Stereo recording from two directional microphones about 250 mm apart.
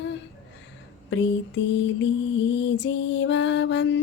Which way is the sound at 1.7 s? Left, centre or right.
Left.